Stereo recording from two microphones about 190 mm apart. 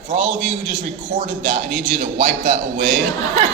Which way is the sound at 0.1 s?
45° right (ahead or behind).